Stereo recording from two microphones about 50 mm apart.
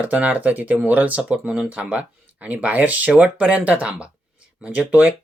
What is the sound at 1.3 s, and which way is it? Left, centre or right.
Speech, centre.